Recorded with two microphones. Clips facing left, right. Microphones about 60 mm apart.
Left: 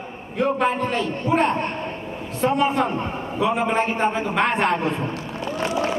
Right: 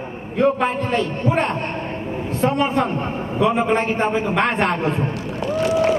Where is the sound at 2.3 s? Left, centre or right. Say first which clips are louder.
Right 1 dB; centre.